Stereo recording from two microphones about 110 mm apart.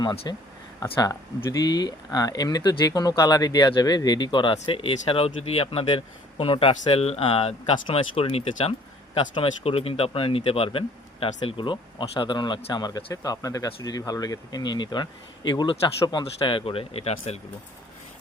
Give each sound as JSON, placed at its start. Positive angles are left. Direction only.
{"t": 0.3, "sound": "speech", "side_deg": 40}
{"t": 1.5, "sound": "a man's voice", "side_deg": 35}
{"t": 16.5, "sound": "speech", "side_deg": 55}